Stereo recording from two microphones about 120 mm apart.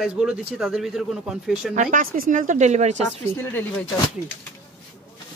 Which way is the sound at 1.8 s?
90° right.